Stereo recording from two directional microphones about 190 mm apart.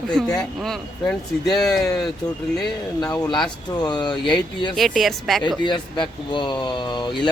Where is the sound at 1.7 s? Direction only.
20° left (ahead or behind).